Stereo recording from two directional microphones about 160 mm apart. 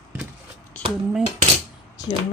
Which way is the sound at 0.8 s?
5° left (ahead or behind).